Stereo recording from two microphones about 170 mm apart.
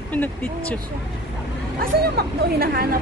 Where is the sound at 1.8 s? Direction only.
65° right (ahead or behind).